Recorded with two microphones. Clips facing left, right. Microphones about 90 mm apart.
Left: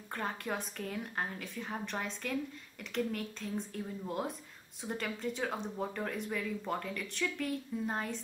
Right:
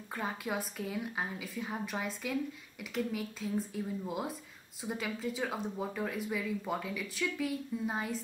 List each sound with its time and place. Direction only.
0.1 s speech: 5° right (ahead or behind)